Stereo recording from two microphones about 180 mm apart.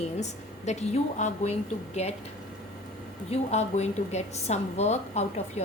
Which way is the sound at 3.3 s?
40° left (ahead or behind).